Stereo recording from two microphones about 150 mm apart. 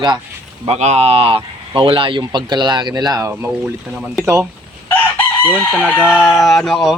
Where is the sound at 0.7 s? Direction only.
45° right (ahead or behind); by 3.3 s 25° right (ahead or behind).